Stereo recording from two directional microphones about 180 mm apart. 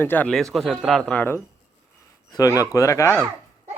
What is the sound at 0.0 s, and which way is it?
Speech, 10° left (ahead or behind).